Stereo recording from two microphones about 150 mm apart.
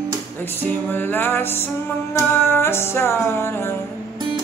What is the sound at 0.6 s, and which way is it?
Music, 15° left (ahead or behind).